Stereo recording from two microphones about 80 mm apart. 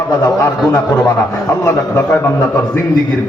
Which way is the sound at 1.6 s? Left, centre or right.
Left.